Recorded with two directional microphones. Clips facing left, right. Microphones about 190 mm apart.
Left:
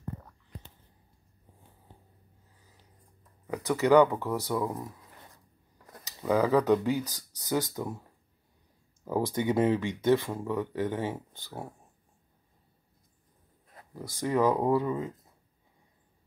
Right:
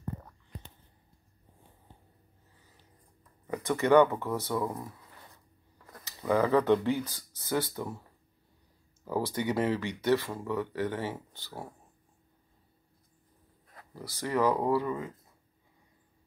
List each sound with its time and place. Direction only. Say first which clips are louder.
3.5 s speech: left 1 dB; 5° left (ahead or behind)
4.6 s speech: left 1 dB; centre (ahead or behind)
5.9 s speech: left 1 dB; 15° left (ahead or behind)
9.0 s speech: left 2 dB; 20° left (ahead or behind)
14.2 s speech: left 2 dB; 20° left (ahead or behind)